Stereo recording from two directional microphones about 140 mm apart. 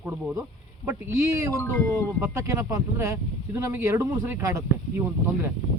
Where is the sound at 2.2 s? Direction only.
20° right (ahead or behind).